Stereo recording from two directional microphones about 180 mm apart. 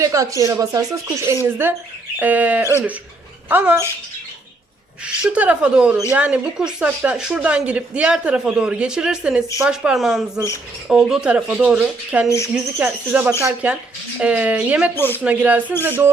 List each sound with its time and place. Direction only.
0.0 s speech: 15° right (ahead or behind)
5.0 s speech: 5° right (ahead or behind)
14.9 s speech: 10° left (ahead or behind)
15.2 s speech: 10° right (ahead or behind)